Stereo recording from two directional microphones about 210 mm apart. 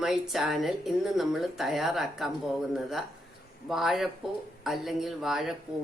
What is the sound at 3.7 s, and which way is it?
Speech, centre (ahead or behind).